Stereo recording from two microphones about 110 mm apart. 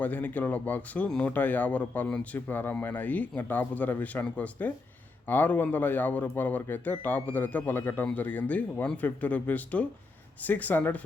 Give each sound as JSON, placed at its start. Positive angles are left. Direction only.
{"t": 0.0, "sound": "speech", "side_deg": 15}